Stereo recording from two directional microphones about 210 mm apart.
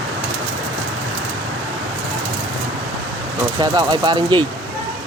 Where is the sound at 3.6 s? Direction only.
20° right (ahead or behind).